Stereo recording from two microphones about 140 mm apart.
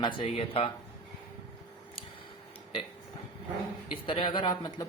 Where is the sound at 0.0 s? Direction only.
40° left (ahead or behind).